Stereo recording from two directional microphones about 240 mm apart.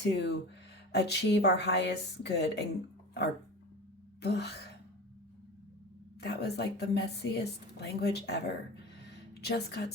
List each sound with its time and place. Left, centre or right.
0.0 s a woman's voice: left
4.2 s a woman's voice: left
6.1 s a woman's voice: left
9.0 s a sound: left